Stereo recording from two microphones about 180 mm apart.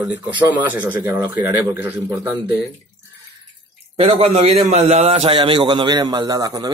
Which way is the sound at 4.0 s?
35° right (ahead or behind).